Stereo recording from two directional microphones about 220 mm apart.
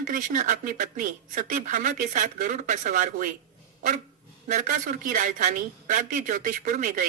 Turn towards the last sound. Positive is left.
turn(degrees=-35)  # may be behind; listen again after turning